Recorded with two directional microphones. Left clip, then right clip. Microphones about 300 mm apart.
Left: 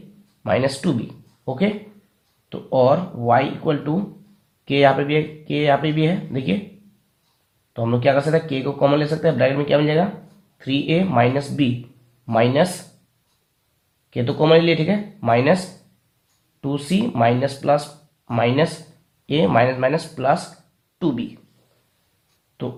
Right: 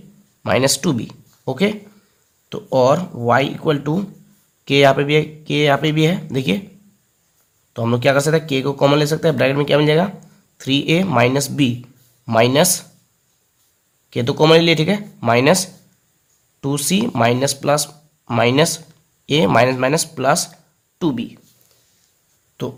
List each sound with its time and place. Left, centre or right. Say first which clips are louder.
0.4 s speech: right 3 dB; right
7.7 s speech: right 2 dB; right
14.1 s speech: right 3 dB; right
16.6 s speech: right 4 dB; right